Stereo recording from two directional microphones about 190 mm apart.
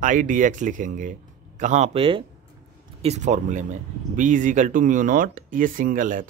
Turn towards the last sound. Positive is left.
turn(degrees=-45)  # may be behind; listen again after turning